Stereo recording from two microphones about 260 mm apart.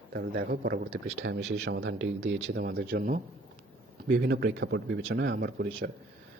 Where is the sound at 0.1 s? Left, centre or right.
Right.